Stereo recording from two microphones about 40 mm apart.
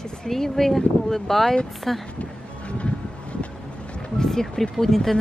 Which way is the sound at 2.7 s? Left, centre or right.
Left.